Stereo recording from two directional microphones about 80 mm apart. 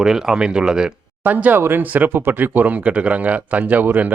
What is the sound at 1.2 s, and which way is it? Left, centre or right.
Speech, right.